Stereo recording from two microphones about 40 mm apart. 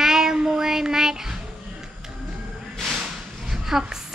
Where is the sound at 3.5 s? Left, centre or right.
Centre.